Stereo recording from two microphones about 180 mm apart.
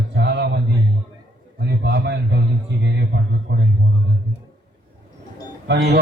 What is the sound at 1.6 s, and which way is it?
A man's voice, 70° right (ahead or behind).